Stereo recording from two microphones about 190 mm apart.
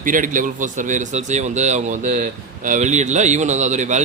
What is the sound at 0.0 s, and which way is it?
A man's voice, 45° right (ahead or behind).